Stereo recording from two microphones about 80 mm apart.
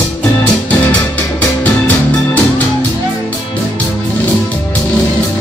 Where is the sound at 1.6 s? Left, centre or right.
Centre.